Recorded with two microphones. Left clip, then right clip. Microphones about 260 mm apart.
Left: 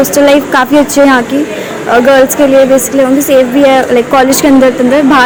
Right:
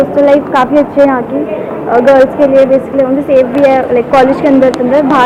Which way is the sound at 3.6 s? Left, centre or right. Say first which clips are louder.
Left 2 dB; left.